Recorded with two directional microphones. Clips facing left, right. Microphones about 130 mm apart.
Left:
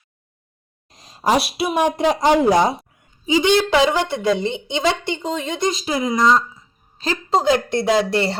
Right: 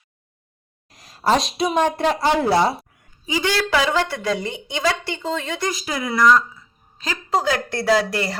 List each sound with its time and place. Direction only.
0.9 s a woman's voice: 20° left (ahead or behind)